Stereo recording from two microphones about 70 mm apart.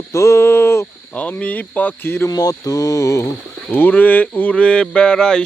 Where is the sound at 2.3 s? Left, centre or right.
Left.